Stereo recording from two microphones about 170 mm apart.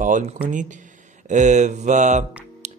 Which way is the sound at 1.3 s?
45° right (ahead or behind).